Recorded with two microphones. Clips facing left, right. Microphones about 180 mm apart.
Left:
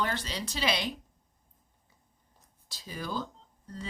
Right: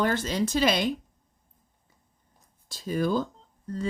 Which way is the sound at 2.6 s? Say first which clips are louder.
Right 12 dB; 50° right (ahead or behind).